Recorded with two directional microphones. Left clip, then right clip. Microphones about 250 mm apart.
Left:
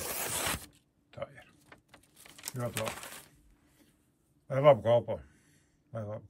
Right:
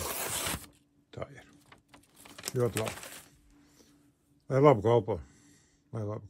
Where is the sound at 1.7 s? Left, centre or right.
Centre.